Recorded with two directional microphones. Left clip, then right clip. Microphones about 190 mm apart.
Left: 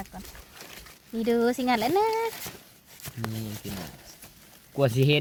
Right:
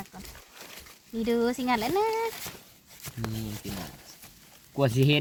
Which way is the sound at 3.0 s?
20° left (ahead or behind).